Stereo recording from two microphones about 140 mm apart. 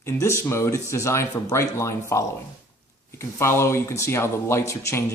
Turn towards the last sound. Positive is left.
turn(degrees=20)  # may be behind; listen again after turning